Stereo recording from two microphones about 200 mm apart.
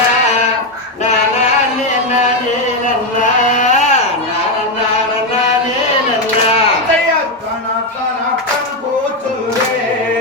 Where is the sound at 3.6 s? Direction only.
35° left (ahead or behind).